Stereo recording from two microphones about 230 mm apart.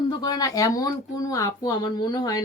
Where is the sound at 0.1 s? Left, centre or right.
Centre.